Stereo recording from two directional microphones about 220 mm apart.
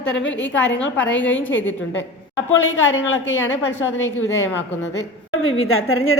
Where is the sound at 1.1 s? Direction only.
60° left (ahead or behind).